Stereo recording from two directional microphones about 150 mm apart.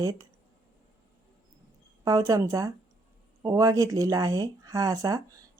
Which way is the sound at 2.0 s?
25° right (ahead or behind).